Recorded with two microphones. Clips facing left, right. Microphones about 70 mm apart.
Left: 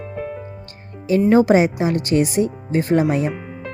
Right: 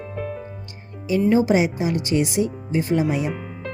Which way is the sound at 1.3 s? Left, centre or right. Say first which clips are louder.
Left 5 dB; left.